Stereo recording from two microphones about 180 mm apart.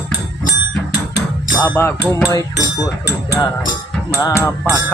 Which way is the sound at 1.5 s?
10° left (ahead or behind).